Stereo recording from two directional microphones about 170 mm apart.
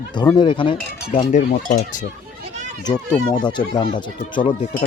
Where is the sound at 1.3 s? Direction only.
55° left (ahead or behind).